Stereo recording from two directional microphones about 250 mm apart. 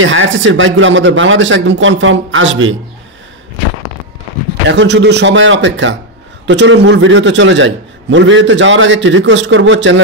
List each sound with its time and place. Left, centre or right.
0.0 s a man's voice: right
4.6 s a man's voice: right